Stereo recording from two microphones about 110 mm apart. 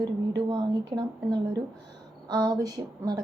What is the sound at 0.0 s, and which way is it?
A woman's voice, 40° right (ahead or behind).